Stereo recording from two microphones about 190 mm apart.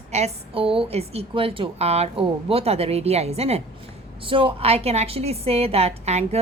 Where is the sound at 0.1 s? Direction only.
30° right (ahead or behind).